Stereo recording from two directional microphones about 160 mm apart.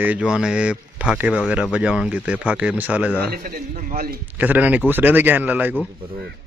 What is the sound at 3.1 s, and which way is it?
Speech, 75° right (ahead or behind).